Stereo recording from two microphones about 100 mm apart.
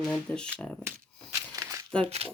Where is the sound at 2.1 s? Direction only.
90° right.